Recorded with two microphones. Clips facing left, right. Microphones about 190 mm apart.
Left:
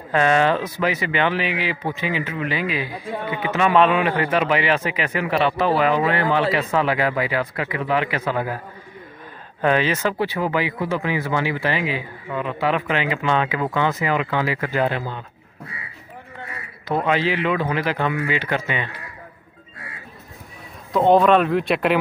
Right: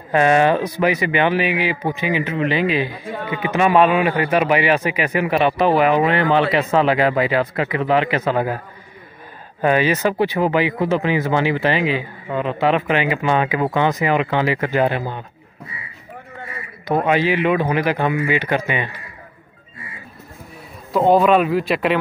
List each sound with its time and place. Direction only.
0.1 s a man's voice: 15° right (ahead or behind)
9.6 s speech: 10° right (ahead or behind)
17.0 s a man's voice: 15° right (ahead or behind)
20.9 s speech: 5° right (ahead or behind)